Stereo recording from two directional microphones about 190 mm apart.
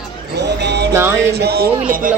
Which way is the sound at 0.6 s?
60° right (ahead or behind).